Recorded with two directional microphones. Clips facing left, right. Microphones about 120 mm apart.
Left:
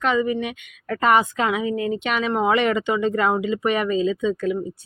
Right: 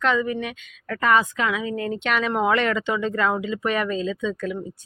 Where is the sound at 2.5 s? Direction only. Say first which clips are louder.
Left 3 dB; 15° left (ahead or behind).